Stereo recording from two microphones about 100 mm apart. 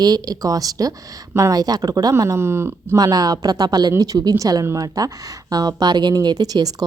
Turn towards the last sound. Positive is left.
turn(degrees=-40)  # may be behind; listen again after turning